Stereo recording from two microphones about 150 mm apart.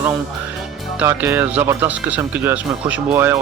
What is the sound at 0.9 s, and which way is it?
Speech, 15° right (ahead or behind).